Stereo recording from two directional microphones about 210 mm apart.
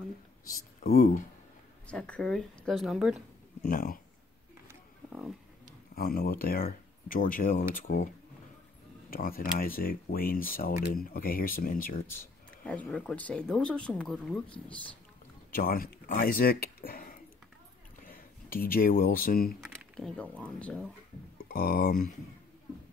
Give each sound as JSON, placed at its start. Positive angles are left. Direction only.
{"t": 0.8, "sound": "speech", "side_deg": 35}
{"t": 1.9, "sound": "speech", "side_deg": 5}
{"t": 3.6, "sound": "speech", "side_deg": 40}
{"t": 4.6, "sound": "wild animals", "side_deg": -5}
{"t": 5.9, "sound": "speech", "side_deg": 45}
{"t": 9.1, "sound": "speech", "side_deg": 45}
{"t": 12.1, "sound": "speech", "side_deg": 10}
{"t": 15.5, "sound": "speech", "side_deg": 45}
{"t": 19.6, "sound": "speech", "side_deg": 0}
{"t": 21.4, "sound": "speech", "side_deg": 45}